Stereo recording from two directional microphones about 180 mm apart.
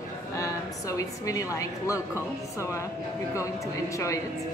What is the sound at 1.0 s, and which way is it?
A woman's voice, 15° left (ahead or behind).